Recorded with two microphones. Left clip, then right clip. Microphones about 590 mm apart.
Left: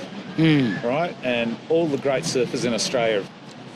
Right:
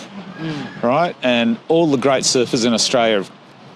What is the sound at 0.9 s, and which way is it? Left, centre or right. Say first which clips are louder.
Speech: right 10 dB; right.